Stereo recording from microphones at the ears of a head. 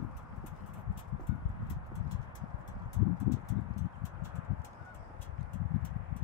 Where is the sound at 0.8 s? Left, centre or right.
Left.